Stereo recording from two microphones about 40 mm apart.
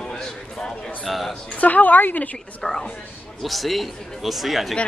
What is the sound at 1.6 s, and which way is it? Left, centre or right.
Speech, left.